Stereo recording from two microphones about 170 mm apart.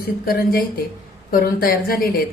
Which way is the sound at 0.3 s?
60° left (ahead or behind).